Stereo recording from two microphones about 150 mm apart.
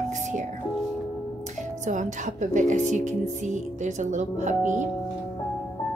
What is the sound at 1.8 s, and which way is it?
Speech, 55° right (ahead or behind).